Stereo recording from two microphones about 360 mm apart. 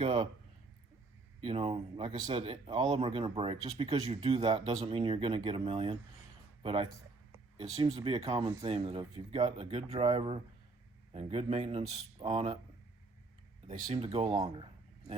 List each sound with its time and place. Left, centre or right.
0.0 s speech: centre
1.4 s speech: centre
13.7 s speech: centre